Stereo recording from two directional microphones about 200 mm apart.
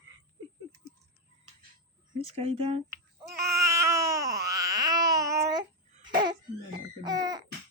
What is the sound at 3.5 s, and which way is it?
Baby cry, 15° right (ahead or behind).